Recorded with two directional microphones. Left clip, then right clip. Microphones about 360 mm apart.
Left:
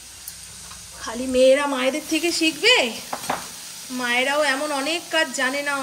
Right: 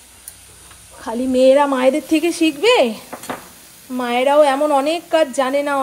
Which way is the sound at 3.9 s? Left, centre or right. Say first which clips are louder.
Right 7 dB; centre.